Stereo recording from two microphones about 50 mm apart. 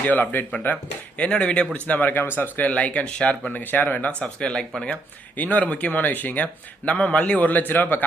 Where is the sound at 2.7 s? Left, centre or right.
Left.